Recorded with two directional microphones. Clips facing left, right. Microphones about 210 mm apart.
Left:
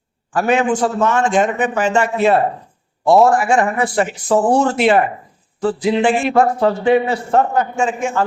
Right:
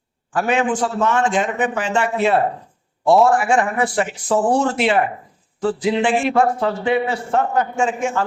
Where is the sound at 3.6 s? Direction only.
40° left (ahead or behind).